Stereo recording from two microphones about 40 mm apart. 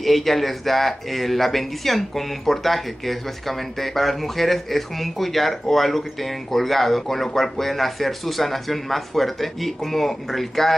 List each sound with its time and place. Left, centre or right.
0.0 s speech: centre